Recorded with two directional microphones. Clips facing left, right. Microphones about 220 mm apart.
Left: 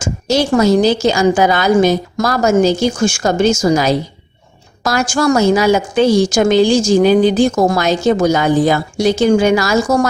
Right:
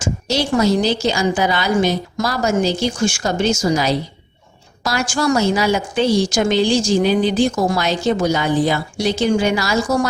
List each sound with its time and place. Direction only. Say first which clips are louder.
0.0 s a woman's voice: left 5 dB; 45° left (ahead or behind)